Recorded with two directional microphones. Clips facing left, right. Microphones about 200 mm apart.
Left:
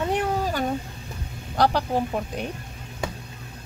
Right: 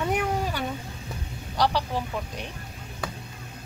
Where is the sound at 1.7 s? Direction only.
45° left (ahead or behind).